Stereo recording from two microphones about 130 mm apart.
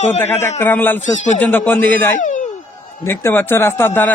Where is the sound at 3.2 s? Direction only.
15° left (ahead or behind).